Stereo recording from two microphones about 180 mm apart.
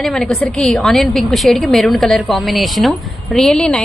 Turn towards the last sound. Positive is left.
turn(degrees=5)  # may be behind; listen again after turning